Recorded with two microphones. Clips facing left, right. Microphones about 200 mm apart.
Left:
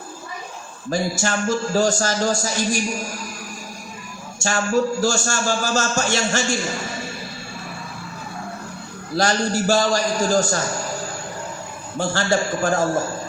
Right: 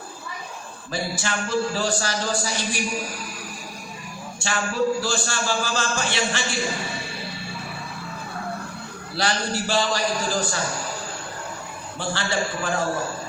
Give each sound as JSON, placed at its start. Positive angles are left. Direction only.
{"t": 0.9, "sound": "a man's voice", "side_deg": 45}
{"t": 4.4, "sound": "a man's voice", "side_deg": 45}
{"t": 9.1, "sound": "a man's voice", "side_deg": 45}
{"t": 11.9, "sound": "a man's voice", "side_deg": 45}